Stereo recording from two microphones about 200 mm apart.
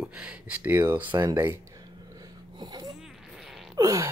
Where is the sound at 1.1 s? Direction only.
20° right (ahead or behind).